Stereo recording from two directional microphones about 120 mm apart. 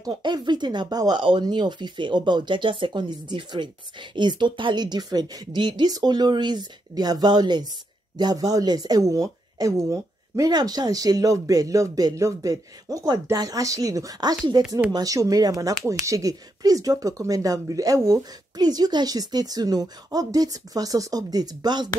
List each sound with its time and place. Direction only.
0.0 s speech: 35° right (ahead or behind)